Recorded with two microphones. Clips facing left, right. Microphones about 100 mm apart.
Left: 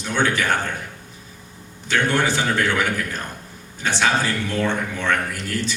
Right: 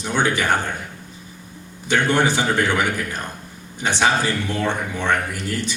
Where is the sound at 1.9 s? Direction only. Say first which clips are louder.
Right 2 dB; 15° right (ahead or behind).